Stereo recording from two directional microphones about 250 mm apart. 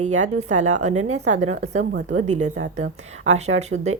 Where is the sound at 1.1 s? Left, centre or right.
Right.